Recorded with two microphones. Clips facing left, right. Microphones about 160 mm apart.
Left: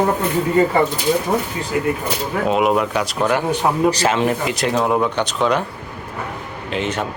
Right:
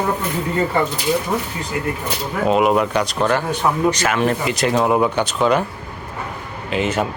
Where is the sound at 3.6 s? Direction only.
30° left (ahead or behind).